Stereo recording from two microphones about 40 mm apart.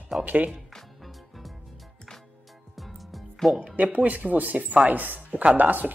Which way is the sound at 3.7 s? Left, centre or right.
Right.